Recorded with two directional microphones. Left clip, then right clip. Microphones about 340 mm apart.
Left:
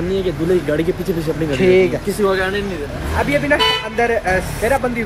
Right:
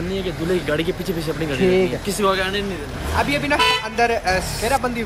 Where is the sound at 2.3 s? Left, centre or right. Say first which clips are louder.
Left 3 dB; centre.